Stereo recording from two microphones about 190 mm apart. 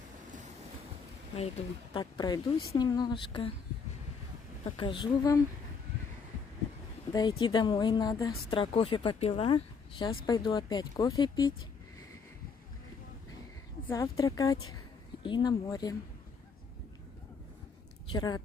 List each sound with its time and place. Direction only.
2.0 s speech: 20° left (ahead or behind)
4.6 s speech: 25° left (ahead or behind)
7.1 s speech: 20° left (ahead or behind)
13.8 s speech: 15° left (ahead or behind)
18.1 s speech: 20° left (ahead or behind)